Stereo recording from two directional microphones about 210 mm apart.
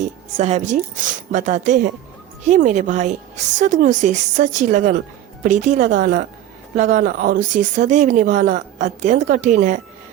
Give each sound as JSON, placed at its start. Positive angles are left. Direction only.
{"t": 0.3, "sound": "speech", "side_deg": -30}